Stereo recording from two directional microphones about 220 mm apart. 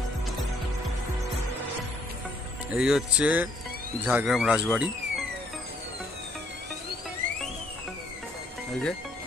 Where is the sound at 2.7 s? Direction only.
5° right (ahead or behind).